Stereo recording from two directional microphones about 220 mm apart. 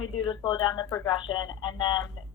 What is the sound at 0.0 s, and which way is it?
A woman's voice, 20° left (ahead or behind).